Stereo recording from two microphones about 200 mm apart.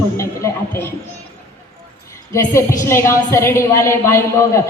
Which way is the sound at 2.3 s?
15° left (ahead or behind).